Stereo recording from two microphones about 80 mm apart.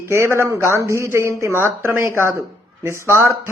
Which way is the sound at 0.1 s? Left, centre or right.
Right.